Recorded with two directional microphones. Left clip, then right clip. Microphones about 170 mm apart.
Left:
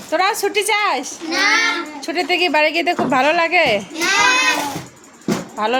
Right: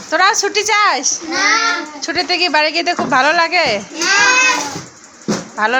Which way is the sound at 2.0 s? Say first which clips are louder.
Right 2 dB; 15° left (ahead or behind).